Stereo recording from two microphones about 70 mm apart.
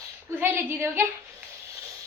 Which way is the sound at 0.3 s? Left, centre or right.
Right.